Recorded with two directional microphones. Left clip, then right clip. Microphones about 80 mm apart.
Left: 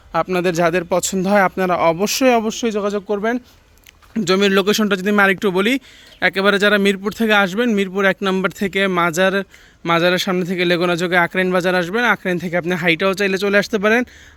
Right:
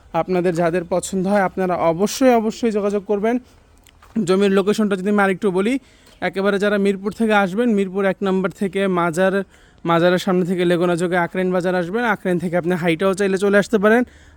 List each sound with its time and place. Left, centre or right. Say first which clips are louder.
0.1 s speech: left 1 dB; right
0.4 s speech: left 2 dB; centre
0.8 s speech: left 3 dB; centre
2.0 s speech: left 1 dB; right
2.4 s speech: left 1 dB; right
2.6 s speech: even; right
4.2 s speech: left 1 dB; right
8.2 s speech: left 2 dB; right
9.8 s speech: left 1 dB; right
11.1 s speech: left 4 dB; centre
12.0 s speech: left 3 dB; right
12.4 s speech: left 1 dB; right